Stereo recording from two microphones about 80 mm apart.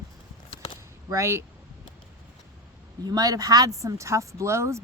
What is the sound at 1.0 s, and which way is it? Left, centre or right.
Speech, right.